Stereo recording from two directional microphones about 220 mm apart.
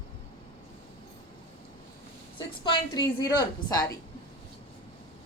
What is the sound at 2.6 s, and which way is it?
A woman's voice, 20° left (ahead or behind).